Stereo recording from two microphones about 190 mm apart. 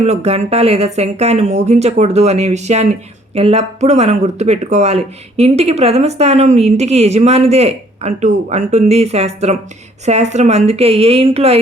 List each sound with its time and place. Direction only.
0.0 s speech: 35° right (ahead or behind)